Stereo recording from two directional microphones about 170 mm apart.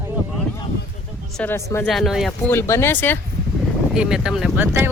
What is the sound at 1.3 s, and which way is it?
Speech, 10° left (ahead or behind).